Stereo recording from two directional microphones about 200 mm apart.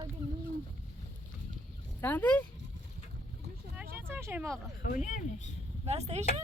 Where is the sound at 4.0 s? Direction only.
10° right (ahead or behind).